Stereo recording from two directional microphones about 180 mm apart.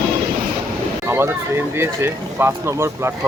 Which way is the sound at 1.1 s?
15° right (ahead or behind).